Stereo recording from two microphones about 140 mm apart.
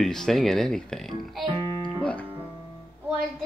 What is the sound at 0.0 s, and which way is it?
Speech, 5° left (ahead or behind).